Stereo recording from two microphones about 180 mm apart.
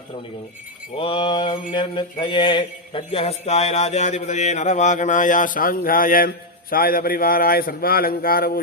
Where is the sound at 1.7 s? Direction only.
25° left (ahead or behind).